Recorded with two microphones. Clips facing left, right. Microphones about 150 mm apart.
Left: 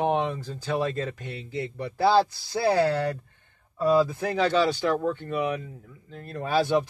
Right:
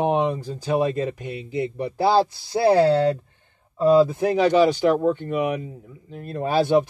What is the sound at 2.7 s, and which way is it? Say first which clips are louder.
Speech: right 7 dB; 30° right (ahead or behind).